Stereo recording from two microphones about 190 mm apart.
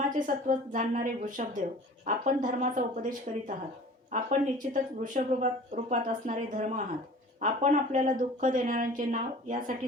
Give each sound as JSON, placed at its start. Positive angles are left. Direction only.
{"t": 0.1, "sound": "speech", "side_deg": -45}